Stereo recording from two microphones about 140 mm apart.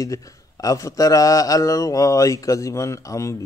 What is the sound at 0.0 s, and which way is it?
A man's voice, 25° left (ahead or behind).